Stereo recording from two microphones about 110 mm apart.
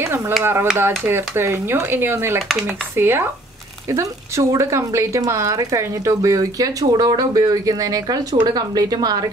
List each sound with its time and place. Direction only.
0.4 s speech: 20° right (ahead or behind); by 9.2 s 35° right (ahead or behind)